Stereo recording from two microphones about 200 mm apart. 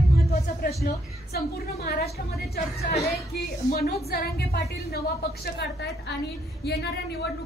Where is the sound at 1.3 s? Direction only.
50° left (ahead or behind).